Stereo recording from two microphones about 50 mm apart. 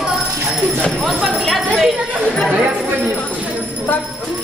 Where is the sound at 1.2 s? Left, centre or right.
Centre.